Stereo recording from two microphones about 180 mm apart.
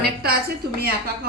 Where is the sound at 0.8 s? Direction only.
60° right (ahead or behind).